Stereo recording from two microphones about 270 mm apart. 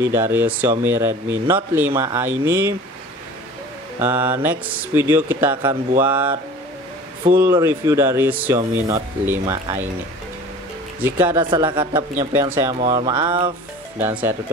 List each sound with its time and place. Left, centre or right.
0.0 s speech: centre
4.0 s speech: centre
7.4 s speech: centre
11.0 s speech: centre
13.9 s speech: centre